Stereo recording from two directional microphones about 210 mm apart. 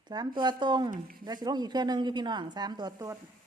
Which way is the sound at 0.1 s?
20° right (ahead or behind).